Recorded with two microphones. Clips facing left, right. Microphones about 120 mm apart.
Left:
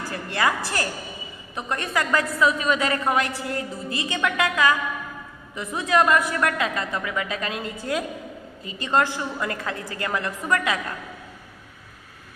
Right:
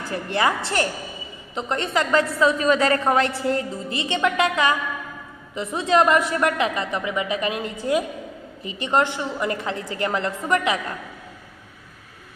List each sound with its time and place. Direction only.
0.1 s a woman's voice: 25° right (ahead or behind)